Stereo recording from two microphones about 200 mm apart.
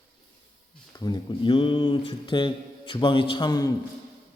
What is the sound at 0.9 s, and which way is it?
A man's voice, 20° left (ahead or behind).